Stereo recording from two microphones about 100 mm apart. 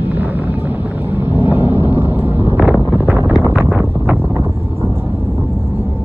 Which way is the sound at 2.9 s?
20° right (ahead or behind).